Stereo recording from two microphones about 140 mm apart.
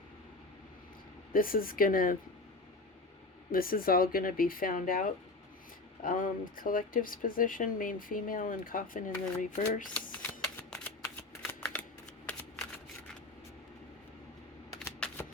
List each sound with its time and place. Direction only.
1.3 s speech: 90° left
3.5 s speech: 90° left; by 9.9 s 65° left (ahead or behind)
9.9 s shuffling cards: 10° left (ahead or behind)
15.0 s shuffling cards: 5° left (ahead or behind)